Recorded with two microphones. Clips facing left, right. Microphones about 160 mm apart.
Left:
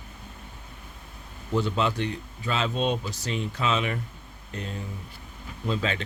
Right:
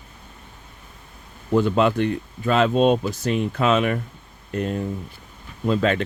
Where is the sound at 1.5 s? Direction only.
55° right (ahead or behind).